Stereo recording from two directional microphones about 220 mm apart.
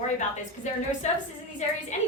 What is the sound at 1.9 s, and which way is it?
Speech, 30° left (ahead or behind).